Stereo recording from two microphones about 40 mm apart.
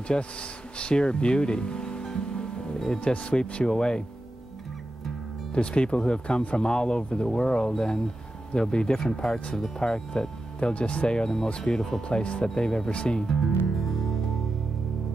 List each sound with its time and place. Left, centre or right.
0.1 s speech: left
5.5 s speech: left
10.6 s speech: left; by 12.2 s centre
12.2 s speech: left
13.7 s music: centre